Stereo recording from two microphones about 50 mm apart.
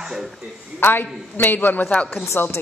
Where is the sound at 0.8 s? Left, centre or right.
Left.